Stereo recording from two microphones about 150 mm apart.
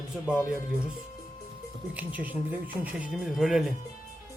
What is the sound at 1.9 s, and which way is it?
Speech, 10° right (ahead or behind).